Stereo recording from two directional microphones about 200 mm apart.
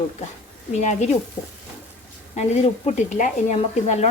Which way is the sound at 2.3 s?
35° left (ahead or behind).